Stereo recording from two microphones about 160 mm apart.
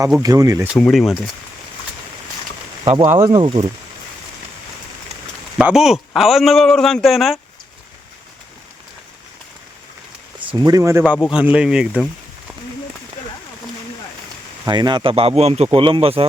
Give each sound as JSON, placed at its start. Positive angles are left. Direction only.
{"t": 0.2, "sound": "speech", "side_deg": -20}
{"t": 0.8, "sound": "a man's voice", "side_deg": 0}
{"t": 3.0, "sound": "speech", "side_deg": -15}
{"t": 3.4, "sound": "speech", "side_deg": -30}
{"t": 5.5, "sound": "a man's voice", "side_deg": -5}
{"t": 10.6, "sound": "a man's voice", "side_deg": -20}
{"t": 14.6, "sound": "speech", "side_deg": -25}